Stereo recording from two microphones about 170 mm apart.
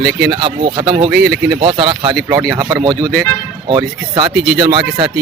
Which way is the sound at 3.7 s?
30° right (ahead or behind).